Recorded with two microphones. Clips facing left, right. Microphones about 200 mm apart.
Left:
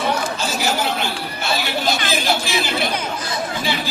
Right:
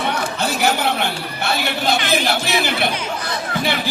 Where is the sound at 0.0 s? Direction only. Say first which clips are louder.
Even; 60° right (ahead or behind).